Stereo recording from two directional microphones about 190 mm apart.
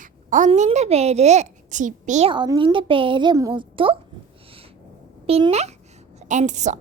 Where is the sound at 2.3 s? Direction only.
25° right (ahead or behind).